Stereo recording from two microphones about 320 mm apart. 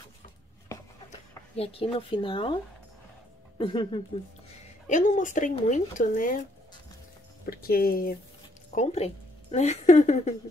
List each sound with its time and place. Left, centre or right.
1.6 s speech: centre
3.5 s speech: centre
7.4 s a woman's voice: left